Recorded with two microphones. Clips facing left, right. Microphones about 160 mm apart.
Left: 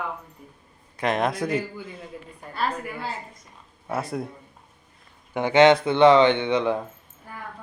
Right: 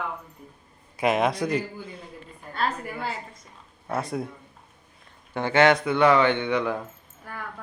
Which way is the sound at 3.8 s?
5° left (ahead or behind).